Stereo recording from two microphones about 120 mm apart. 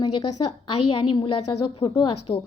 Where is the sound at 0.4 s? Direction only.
40° left (ahead or behind).